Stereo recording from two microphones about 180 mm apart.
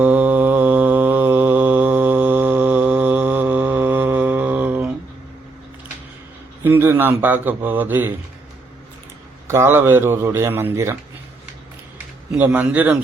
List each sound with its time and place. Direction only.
0.0 s mantra: 10° right (ahead or behind)
6.7 s speech: 10° right (ahead or behind)
9.5 s speech: 15° right (ahead or behind)
12.4 s speech: 10° right (ahead or behind)